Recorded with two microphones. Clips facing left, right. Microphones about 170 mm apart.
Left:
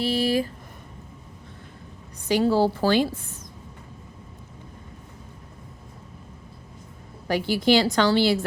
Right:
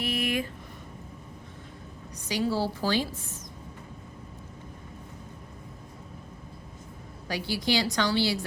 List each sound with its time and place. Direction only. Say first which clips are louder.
0.0 s a sound: left 6 dB; 30° left (ahead or behind)
2.2 s a woman's voice: left 8 dB; 55° left (ahead or behind)
7.3 s a woman's voice: left 8 dB; 55° left (ahead or behind)